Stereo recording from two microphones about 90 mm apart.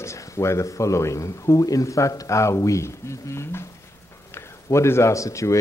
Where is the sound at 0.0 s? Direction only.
30° left (ahead or behind).